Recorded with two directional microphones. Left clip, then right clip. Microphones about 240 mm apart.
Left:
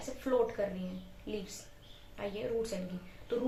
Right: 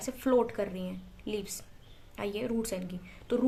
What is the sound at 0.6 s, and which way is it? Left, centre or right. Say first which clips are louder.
Speech: right 1 dB; right.